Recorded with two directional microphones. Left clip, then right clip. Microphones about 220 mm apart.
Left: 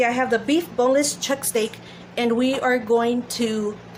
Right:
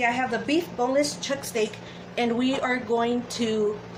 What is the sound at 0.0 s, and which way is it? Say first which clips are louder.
Speech: left 5 dB; 50° left (ahead or behind).